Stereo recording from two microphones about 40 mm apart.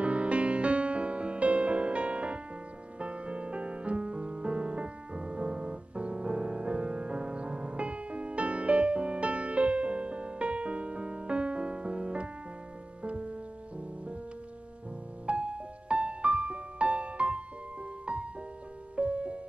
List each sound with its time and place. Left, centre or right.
0.0 s music: right
15.2 s music: right